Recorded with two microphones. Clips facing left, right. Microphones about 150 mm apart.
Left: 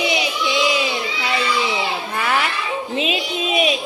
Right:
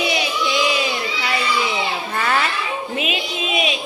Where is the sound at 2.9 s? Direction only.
30° left (ahead or behind).